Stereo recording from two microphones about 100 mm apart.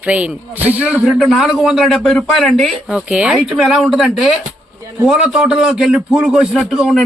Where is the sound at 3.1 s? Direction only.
10° right (ahead or behind).